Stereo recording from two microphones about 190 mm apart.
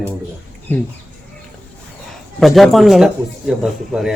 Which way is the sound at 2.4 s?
Centre (ahead or behind).